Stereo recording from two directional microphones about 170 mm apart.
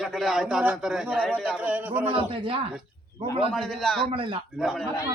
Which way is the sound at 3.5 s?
Centre (ahead or behind).